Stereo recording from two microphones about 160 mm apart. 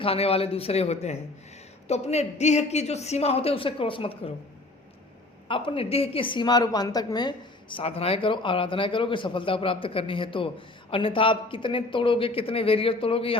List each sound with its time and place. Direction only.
0.0 s a woman's voice: 40° left (ahead or behind)
5.5 s a woman's voice: 35° left (ahead or behind)